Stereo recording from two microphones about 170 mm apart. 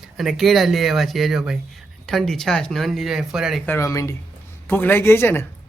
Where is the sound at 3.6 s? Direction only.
15° left (ahead or behind).